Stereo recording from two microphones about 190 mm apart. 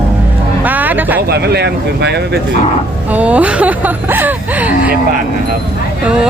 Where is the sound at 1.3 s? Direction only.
60° right (ahead or behind).